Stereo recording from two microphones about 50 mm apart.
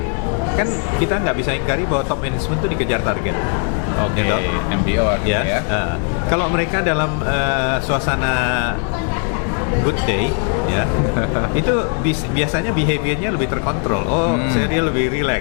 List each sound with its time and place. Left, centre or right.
0.5 s speech: left
9.8 s speech: left